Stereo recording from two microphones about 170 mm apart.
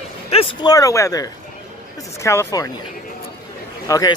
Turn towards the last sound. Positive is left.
turn(degrees=20)  # may be behind; listen again after turning